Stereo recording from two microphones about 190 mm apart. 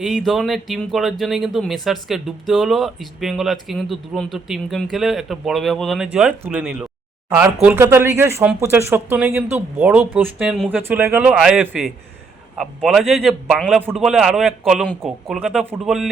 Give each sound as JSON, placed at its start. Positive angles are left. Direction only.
{"t": 0.0, "sound": "speech", "side_deg": 0}